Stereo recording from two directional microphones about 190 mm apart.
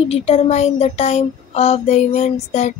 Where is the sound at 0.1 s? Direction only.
30° left (ahead or behind).